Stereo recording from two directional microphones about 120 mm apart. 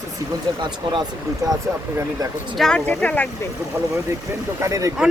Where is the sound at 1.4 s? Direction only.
30° right (ahead or behind).